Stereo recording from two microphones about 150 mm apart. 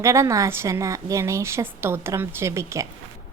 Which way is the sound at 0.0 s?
20° right (ahead or behind).